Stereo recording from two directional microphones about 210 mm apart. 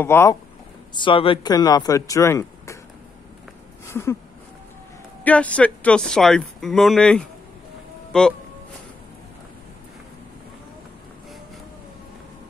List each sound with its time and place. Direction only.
0.0 s speech: 10° left (ahead or behind)
0.9 s speech: 25° left (ahead or behind)
3.8 s a sound: 15° left (ahead or behind)
5.2 s speech: 5° left (ahead or behind)